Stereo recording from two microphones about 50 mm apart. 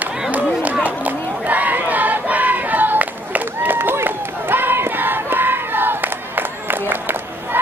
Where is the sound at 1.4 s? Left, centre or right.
Right.